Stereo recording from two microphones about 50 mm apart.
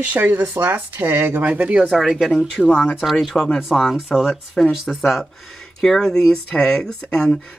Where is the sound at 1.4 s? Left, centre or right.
Right.